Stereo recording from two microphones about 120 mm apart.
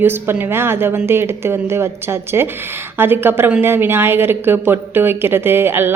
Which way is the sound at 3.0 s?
20° right (ahead or behind).